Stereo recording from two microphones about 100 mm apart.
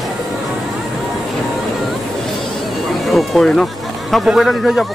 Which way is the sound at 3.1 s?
Centre (ahead or behind).